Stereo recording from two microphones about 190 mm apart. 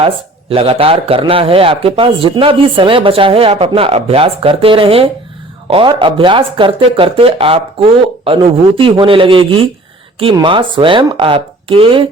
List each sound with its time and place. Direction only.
0.5 s a man's voice: 30° right (ahead or behind)